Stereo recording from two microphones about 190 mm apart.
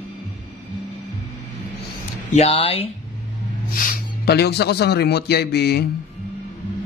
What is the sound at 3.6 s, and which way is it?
A man's voice, 45° left (ahead or behind).